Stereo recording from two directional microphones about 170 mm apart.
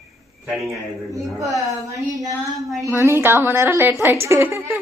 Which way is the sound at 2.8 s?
15° right (ahead or behind).